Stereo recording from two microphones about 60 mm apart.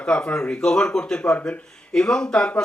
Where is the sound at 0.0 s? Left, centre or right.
Centre.